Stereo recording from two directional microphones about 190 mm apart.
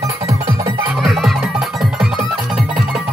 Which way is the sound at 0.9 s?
Centre (ahead or behind).